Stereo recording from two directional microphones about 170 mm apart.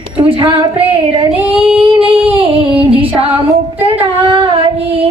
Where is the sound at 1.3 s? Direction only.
5° right (ahead or behind).